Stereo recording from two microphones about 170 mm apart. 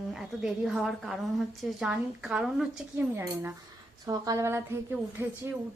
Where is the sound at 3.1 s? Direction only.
15° right (ahead or behind).